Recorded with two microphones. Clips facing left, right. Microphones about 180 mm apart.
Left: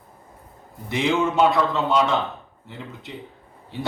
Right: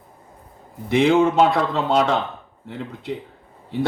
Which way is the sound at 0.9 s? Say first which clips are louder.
Right 6 dB; 55° right (ahead or behind).